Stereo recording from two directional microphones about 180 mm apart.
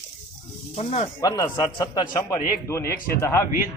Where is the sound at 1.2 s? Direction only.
20° left (ahead or behind).